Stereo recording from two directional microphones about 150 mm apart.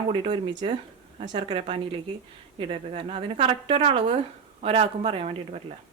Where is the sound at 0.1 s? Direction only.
35° right (ahead or behind).